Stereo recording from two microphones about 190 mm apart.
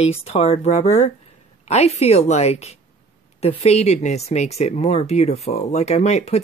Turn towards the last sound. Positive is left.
turn(degrees=35)  # may be behind; listen again after turning